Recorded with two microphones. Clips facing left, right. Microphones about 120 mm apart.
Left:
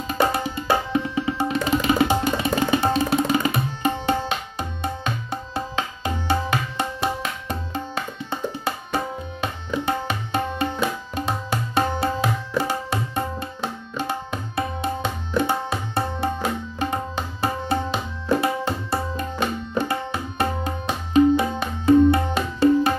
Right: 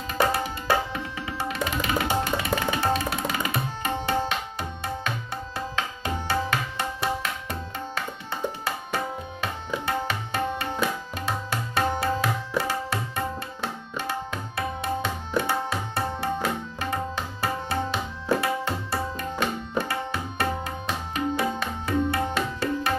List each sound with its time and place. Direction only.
0.2 s music: 20° left (ahead or behind)
2.6 s tabla: 25° left (ahead or behind)
9.8 s tabla: 20° left (ahead or behind)